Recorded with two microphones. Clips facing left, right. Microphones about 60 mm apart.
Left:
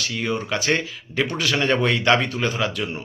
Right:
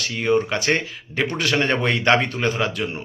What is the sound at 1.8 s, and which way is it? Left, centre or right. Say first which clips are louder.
Speech: even; right.